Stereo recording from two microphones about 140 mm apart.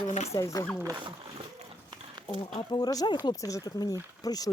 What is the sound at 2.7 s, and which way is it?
Speech, 25° left (ahead or behind).